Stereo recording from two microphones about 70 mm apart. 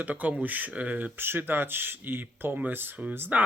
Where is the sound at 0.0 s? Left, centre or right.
Right.